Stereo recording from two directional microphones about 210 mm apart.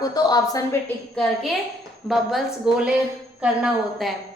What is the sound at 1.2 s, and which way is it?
A woman's voice, 5° left (ahead or behind).